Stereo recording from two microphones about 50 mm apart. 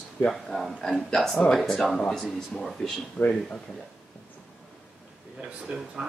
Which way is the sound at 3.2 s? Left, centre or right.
Left.